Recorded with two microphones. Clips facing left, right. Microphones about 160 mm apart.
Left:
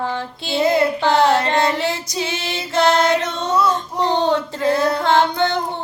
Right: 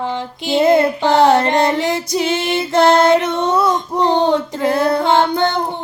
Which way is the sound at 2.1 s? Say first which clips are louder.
Right 7 dB; 55° right (ahead or behind).